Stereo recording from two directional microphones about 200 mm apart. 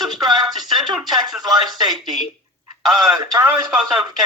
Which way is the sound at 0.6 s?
Centre (ahead or behind).